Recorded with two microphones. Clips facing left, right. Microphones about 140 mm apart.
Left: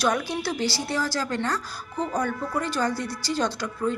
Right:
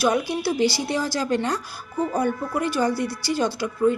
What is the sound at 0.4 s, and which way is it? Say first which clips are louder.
A woman's voice: right 5 dB; 15° right (ahead or behind).